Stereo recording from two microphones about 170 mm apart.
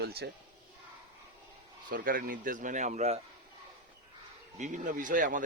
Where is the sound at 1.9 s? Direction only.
60° right (ahead or behind); by 3.1 s 40° right (ahead or behind).